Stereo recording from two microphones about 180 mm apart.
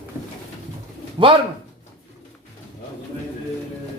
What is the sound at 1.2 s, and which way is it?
Speech, 30° right (ahead or behind).